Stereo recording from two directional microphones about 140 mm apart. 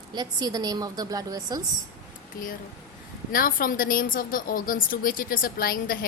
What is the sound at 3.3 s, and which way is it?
A woman's voice, 90° left.